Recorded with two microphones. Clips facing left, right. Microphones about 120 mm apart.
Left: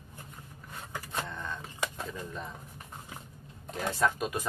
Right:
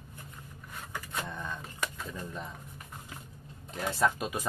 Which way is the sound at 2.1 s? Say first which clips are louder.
Even; centre (ahead or behind).